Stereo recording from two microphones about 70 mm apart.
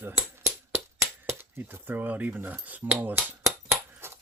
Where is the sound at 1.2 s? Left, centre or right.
Right.